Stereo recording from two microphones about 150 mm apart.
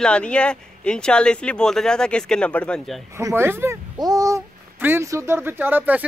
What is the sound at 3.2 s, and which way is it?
Speech, 20° right (ahead or behind).